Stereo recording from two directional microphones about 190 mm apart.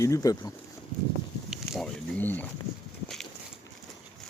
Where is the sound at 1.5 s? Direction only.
Centre (ahead or behind).